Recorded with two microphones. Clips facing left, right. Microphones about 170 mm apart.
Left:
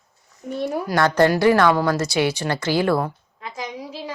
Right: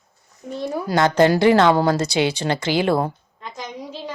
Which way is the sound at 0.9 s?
20° right (ahead or behind).